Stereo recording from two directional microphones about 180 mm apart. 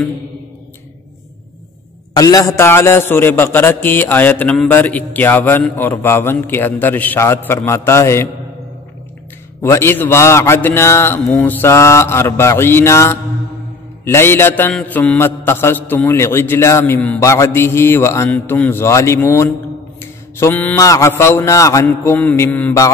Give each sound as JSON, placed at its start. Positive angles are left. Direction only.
{"t": 2.1, "sound": "a man's voice", "side_deg": 20}
{"t": 9.6, "sound": "a man's voice", "side_deg": 15}
{"t": 20.0, "sound": "mantra", "side_deg": 15}
{"t": 21.2, "sound": "a man's voice", "side_deg": 15}